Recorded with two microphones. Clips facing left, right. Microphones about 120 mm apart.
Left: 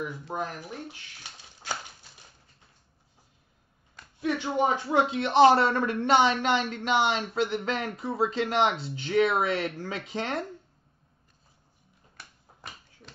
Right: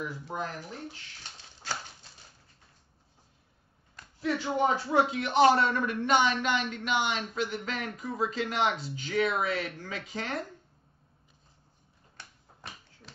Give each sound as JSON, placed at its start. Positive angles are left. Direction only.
{"t": 0.0, "sound": "speech", "side_deg": 20}
{"t": 4.2, "sound": "speech", "side_deg": 20}
{"t": 12.2, "sound": "finger snapping", "side_deg": 0}